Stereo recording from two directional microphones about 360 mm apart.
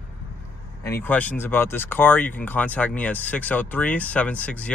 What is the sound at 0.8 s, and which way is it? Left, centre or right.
Speech, centre.